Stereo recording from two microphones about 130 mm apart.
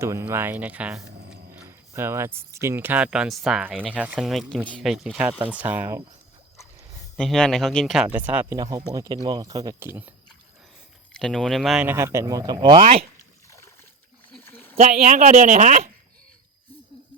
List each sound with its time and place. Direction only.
0.0 s speech: 20° right (ahead or behind)
1.6 s speech: 20° right (ahead or behind)
7.2 s speech: 5° left (ahead or behind)
8.0 s speech: 15° right (ahead or behind)
8.5 s speech: 25° right (ahead or behind)
9.8 s speech: 15° right (ahead or behind)
11.1 s speech: 5° left (ahead or behind)
11.9 s speech: 20° right (ahead or behind); by 13.1 s 45° right (ahead or behind)
13.5 s a sound: 20° left (ahead or behind)
14.8 s speech: 65° right (ahead or behind)